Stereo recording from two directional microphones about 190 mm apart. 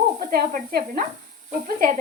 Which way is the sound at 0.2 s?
50° right (ahead or behind).